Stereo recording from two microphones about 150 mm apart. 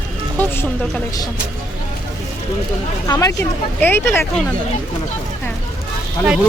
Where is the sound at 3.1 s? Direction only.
20° left (ahead or behind).